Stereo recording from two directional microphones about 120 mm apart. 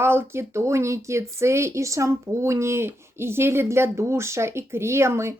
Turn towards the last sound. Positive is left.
turn(degrees=-20)  # may be behind; listen again after turning